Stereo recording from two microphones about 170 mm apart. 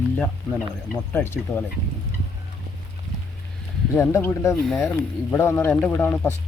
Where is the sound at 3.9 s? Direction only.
15° left (ahead or behind).